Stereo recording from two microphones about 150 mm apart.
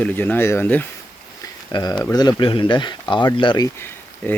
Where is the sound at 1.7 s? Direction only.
25° left (ahead or behind).